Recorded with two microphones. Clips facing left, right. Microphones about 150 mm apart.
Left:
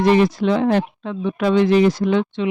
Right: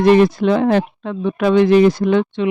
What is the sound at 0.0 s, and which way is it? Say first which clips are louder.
A man's voice: right 4 dB; 55° right (ahead or behind).